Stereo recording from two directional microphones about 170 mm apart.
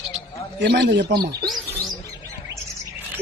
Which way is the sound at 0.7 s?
80° right.